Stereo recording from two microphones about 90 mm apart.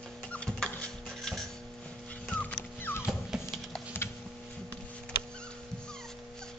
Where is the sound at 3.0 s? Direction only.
5° right (ahead or behind).